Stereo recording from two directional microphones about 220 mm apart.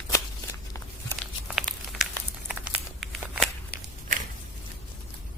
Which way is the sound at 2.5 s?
5° right (ahead or behind).